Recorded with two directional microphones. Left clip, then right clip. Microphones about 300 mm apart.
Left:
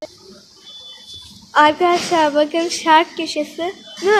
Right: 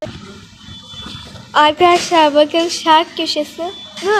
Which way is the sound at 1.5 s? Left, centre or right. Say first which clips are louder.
Right 3 dB; centre.